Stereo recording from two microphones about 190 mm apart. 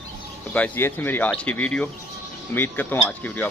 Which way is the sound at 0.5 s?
10° left (ahead or behind).